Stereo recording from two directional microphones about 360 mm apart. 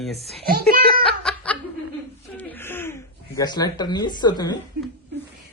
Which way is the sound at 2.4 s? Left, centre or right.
Centre.